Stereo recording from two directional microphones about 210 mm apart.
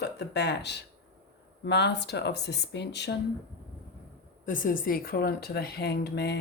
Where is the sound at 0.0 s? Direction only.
55° left (ahead or behind).